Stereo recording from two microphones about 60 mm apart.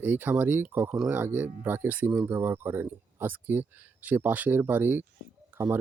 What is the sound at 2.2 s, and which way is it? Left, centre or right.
Speech, right.